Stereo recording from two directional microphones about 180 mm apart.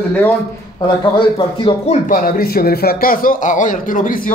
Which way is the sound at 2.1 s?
50° left (ahead or behind).